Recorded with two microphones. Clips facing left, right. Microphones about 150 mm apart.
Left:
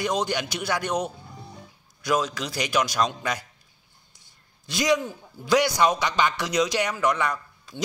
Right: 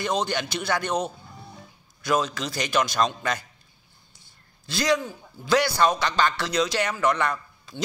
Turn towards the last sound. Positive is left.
turn(degrees=10)  # may be behind; listen again after turning